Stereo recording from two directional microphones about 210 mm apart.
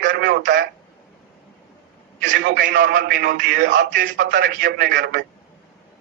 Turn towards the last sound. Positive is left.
turn(degrees=-55)  # may be behind; listen again after turning